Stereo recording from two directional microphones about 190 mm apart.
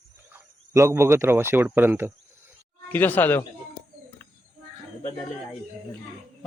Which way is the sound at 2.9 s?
10° left (ahead or behind).